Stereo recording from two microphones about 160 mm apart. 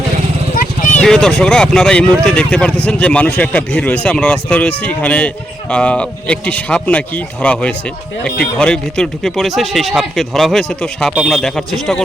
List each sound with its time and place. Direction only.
0.5 s vehicle: 55° left (ahead or behind)
1.0 s speech: 5° left (ahead or behind)